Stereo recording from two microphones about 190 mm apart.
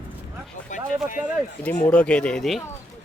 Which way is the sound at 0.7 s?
40° left (ahead or behind).